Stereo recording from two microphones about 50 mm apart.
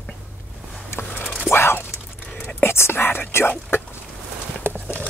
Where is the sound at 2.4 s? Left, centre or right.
Left.